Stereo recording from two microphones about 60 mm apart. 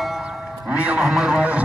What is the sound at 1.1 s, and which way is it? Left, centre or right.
Speech, centre.